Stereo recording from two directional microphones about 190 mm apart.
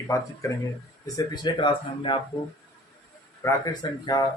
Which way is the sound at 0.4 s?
15° left (ahead or behind).